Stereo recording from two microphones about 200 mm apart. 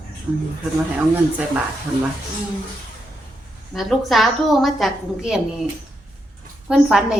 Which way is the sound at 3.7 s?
Centre (ahead or behind).